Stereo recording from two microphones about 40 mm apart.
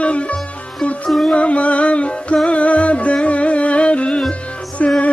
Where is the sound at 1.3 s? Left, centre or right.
Left.